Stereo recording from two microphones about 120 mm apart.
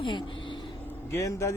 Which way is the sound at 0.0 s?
40° left (ahead or behind).